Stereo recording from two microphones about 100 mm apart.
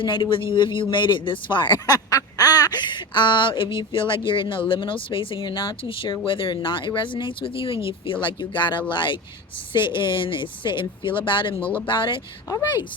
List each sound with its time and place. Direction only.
0.0 s speech: 55° left (ahead or behind)
1.9 s speech: 35° left (ahead or behind)